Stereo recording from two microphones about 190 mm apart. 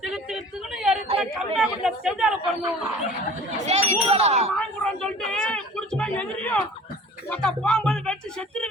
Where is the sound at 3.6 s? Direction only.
35° right (ahead or behind).